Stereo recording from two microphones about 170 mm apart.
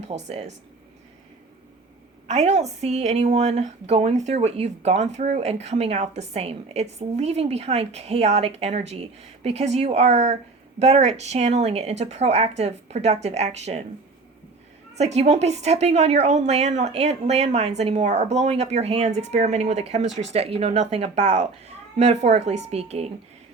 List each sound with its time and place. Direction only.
0.3 s a woman's voice: 40° right (ahead or behind)
2.2 s a woman's voice: 40° right (ahead or behind)
14.9 s a woman's voice: 40° right (ahead or behind)